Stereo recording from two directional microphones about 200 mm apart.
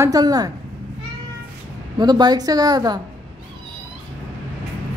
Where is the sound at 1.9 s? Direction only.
20° right (ahead or behind).